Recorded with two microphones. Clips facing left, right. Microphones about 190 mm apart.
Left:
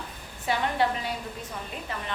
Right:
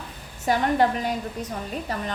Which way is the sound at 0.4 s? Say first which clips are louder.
Right 5 dB; 45° right (ahead or behind).